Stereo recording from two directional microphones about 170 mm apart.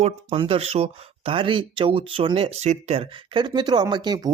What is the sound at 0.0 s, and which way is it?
Speech, 35° right (ahead or behind).